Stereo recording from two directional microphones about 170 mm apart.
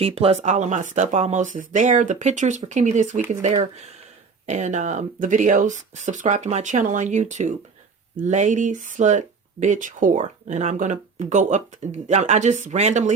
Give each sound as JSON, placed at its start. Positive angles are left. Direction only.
{"t": 0.0, "sound": "speech", "side_deg": -35}